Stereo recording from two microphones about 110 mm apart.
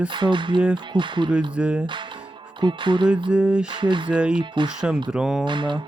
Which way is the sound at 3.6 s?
45° right (ahead or behind).